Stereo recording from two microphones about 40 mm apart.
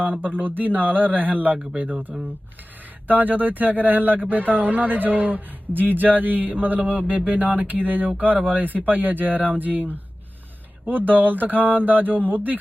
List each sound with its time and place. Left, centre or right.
0.2 s speech: right